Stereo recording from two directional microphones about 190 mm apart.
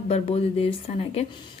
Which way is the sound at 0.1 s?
30° left (ahead or behind).